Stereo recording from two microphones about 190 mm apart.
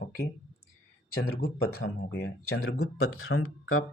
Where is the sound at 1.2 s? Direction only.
60° left (ahead or behind).